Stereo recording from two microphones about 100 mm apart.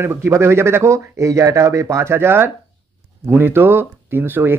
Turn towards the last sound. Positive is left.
turn(degrees=-20)  # may be behind; listen again after turning